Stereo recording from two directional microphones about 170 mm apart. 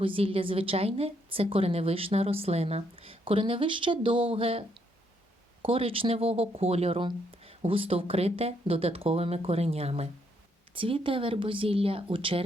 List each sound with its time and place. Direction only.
0.0 s a woman's voice: 30° right (ahead or behind)